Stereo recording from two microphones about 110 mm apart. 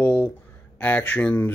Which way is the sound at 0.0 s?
15° left (ahead or behind).